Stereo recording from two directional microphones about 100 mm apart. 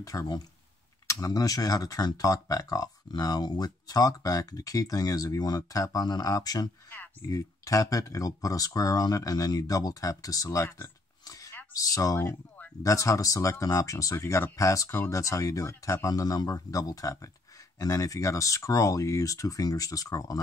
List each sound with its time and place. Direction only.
0.0 s speech: 35° left (ahead or behind)